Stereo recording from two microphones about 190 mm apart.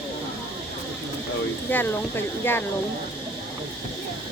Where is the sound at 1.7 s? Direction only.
10° left (ahead or behind).